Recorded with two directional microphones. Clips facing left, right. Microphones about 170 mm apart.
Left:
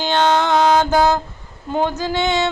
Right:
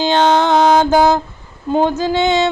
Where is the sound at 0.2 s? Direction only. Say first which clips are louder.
Right 2 dB; 25° right (ahead or behind).